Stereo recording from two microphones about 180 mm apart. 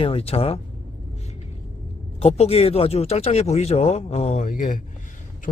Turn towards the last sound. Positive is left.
turn(degrees=50)  # may be behind; listen again after turning